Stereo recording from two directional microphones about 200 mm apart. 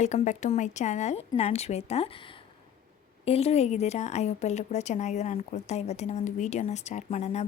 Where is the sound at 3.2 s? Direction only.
30° left (ahead or behind).